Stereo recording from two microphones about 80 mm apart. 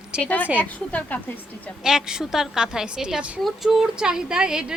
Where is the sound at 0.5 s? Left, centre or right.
Centre.